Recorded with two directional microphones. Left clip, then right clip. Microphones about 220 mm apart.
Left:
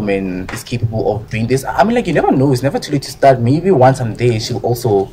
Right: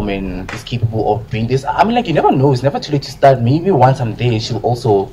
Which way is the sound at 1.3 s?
30° left (ahead or behind).